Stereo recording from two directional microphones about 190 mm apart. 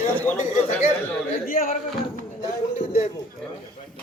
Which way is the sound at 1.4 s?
45° left (ahead or behind).